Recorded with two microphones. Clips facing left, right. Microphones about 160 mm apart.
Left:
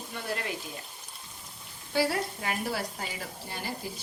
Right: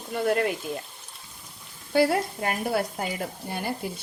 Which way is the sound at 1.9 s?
55° right (ahead or behind).